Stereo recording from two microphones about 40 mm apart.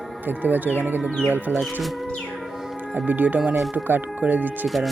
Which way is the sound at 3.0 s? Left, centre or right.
Right.